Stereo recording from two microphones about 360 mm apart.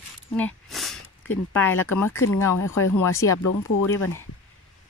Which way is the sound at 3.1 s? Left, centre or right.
Centre.